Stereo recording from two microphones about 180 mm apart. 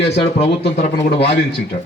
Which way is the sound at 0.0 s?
35° left (ahead or behind).